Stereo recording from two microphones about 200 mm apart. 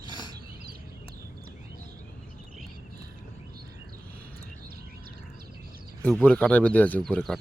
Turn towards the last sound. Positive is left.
turn(degrees=5)  # may be behind; listen again after turning